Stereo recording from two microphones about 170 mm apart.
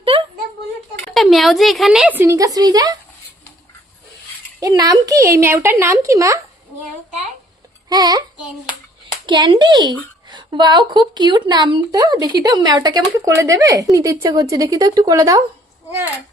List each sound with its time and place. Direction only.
0.0 s a sound: 30° right (ahead or behind)
1.0 s speech: centre (ahead or behind); by 3.0 s 20° right (ahead or behind)
4.6 s a woman's voice: 20° right (ahead or behind)
7.9 s a woman's voice: 25° right (ahead or behind)
9.2 s a woman's voice: 30° right (ahead or behind)